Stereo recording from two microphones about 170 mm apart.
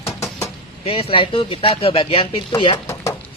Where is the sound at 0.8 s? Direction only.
30° left (ahead or behind).